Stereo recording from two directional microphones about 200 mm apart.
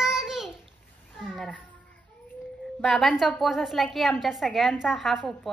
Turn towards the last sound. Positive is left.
turn(degrees=0)  # may be behind; listen again after turning